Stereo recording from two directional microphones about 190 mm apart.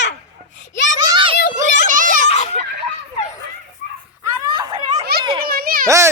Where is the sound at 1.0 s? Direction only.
25° right (ahead or behind).